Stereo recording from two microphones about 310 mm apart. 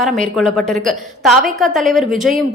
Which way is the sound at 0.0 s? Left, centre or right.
Centre.